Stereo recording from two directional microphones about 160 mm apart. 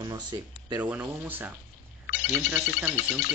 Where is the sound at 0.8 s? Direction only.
10° right (ahead or behind).